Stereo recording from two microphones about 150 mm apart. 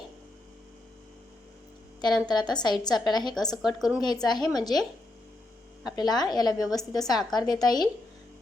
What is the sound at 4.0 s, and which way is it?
Speech, 30° left (ahead or behind).